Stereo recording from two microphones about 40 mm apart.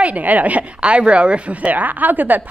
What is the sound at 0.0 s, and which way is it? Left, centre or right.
Speech, right.